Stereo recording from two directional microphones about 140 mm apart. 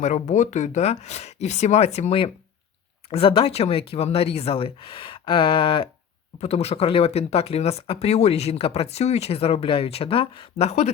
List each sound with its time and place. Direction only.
0.0 s speech: 60° left (ahead or behind)